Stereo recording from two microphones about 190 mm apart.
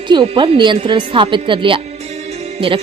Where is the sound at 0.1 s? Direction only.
25° right (ahead or behind).